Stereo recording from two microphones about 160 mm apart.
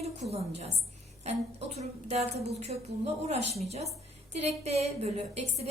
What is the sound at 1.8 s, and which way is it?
A woman's voice, 40° right (ahead or behind).